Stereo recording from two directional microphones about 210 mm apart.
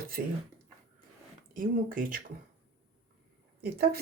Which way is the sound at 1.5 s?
40° right (ahead or behind).